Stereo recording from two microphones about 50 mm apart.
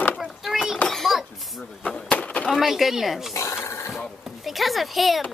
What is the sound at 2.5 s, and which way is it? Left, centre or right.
Speech, centre.